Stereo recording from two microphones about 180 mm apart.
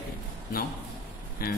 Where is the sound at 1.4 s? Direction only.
55° left (ahead or behind).